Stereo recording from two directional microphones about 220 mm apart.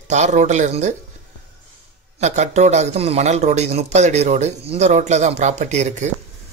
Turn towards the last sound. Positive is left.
turn(degrees=-30)  # may be behind; listen again after turning